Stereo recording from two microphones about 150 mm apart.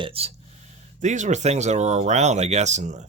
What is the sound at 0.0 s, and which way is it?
Speech, 40° right (ahead or behind).